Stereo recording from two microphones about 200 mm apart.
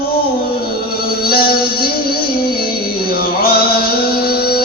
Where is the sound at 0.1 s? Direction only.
50° left (ahead or behind).